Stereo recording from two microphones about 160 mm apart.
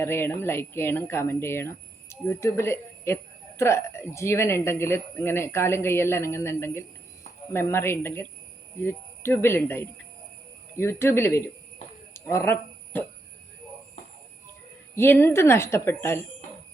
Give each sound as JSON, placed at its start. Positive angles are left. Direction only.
{"t": 0.0, "sound": "speech", "side_deg": 15}
{"t": 12.1, "sound": "a sound", "side_deg": 15}
{"t": 14.9, "sound": "speech", "side_deg": 15}